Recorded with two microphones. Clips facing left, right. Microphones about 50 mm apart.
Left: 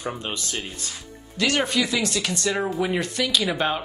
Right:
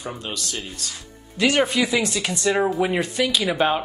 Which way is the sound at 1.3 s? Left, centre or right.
Centre.